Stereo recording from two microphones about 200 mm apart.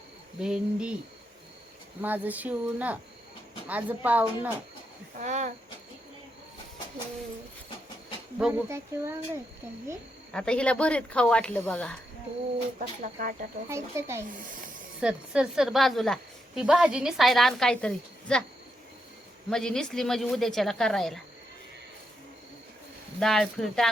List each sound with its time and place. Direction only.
0.4 s a woman's voice: 5° right (ahead or behind)
2.0 s speech: 10° right (ahead or behind)
5.1 s speech: 35° right (ahead or behind)
8.4 s speech: 5° right (ahead or behind)
10.3 s a woman's voice: 5° left (ahead or behind)
13.0 s speech: 45° right (ahead or behind)
13.7 s a woman's voice: 15° right (ahead or behind); by 18.4 s 5° left (ahead or behind)
19.5 s a woman's voice: centre (ahead or behind)
23.2 s a woman's voice: centre (ahead or behind)